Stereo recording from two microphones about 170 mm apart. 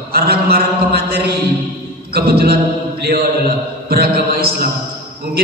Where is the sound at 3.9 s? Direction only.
65° right (ahead or behind).